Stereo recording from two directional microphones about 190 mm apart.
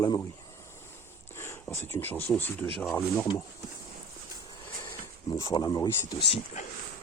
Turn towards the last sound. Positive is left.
turn(degrees=25)  # may be behind; listen again after turning